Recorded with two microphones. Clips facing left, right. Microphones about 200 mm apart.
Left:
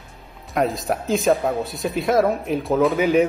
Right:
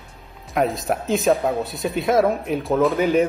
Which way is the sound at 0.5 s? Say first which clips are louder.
Even; centre (ahead or behind).